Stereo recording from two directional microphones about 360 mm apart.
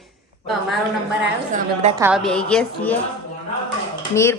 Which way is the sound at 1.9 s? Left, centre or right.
Centre.